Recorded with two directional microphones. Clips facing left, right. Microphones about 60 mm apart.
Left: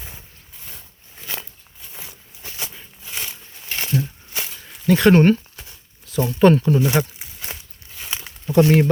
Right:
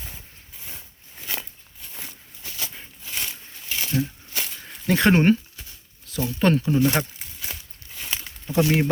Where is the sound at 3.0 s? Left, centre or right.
Centre.